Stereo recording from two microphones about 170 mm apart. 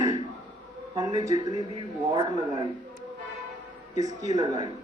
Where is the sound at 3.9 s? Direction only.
20° right (ahead or behind).